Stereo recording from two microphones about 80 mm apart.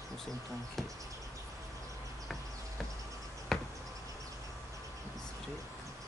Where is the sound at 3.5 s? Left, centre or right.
Centre.